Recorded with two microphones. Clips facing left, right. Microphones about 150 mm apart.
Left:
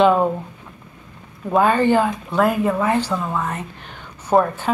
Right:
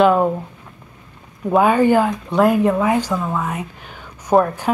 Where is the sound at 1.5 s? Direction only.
10° right (ahead or behind).